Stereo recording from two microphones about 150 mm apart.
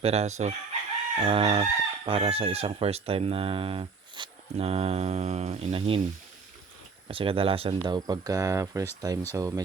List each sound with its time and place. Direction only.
0.0 s chicken: 45° right (ahead or behind)
1.2 s speech: 40° right (ahead or behind)
7.1 s speech: 40° right (ahead or behind); by 9.6 s 20° right (ahead or behind)